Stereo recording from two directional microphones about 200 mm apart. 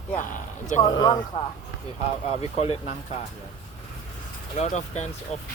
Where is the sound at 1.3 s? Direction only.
25° left (ahead or behind).